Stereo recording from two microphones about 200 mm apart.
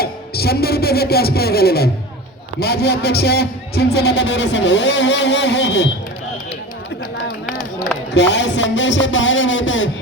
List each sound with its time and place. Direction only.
0.0 s a man's voice: 50° left (ahead or behind)
8.1 s music: 60° left (ahead or behind)